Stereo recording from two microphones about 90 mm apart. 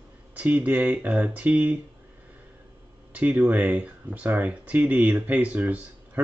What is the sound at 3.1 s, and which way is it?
Speech, 20° right (ahead or behind).